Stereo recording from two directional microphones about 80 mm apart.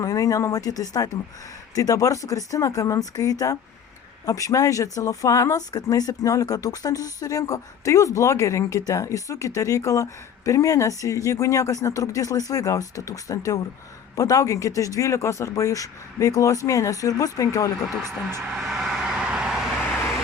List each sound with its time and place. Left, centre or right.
0.0 s speech: left
18.5 s vehicle: centre